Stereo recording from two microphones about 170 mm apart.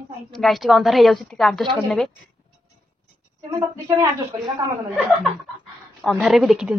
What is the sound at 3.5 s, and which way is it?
Speech, 25° right (ahead or behind).